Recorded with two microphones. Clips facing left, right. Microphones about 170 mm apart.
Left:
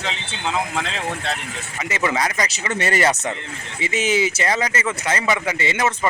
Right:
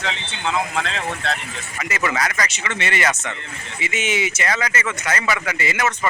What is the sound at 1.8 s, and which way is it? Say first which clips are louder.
Speech: left 1 dB; 25° left (ahead or behind).